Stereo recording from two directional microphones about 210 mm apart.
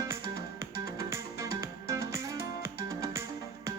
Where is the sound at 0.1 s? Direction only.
15° right (ahead or behind).